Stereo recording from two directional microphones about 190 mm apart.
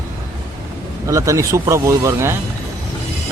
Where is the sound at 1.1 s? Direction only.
15° right (ahead or behind).